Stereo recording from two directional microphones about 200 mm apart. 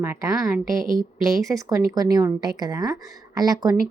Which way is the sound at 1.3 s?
Centre (ahead or behind).